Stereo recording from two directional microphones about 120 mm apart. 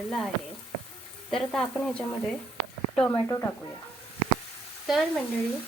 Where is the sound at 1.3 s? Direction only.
Centre (ahead or behind).